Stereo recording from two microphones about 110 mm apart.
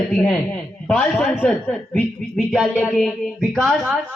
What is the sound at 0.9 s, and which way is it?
Speech, 10° left (ahead or behind).